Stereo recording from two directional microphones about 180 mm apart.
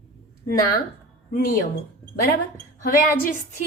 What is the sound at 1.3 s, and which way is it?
Speech, 55° left (ahead or behind).